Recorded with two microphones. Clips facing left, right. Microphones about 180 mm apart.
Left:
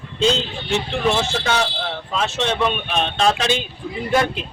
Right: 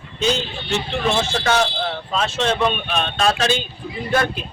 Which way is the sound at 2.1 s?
15° left (ahead or behind).